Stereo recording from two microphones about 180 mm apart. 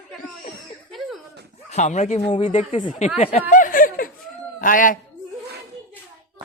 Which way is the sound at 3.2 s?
35° left (ahead or behind).